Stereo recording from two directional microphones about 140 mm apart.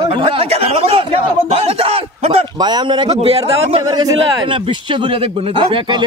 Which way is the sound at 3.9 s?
30° right (ahead or behind).